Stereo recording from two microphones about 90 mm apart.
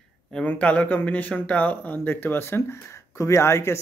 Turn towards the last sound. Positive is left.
turn(degrees=30)  # may be behind; listen again after turning